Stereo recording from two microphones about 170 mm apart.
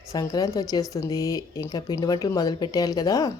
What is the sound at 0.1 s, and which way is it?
Speech, 20° left (ahead or behind).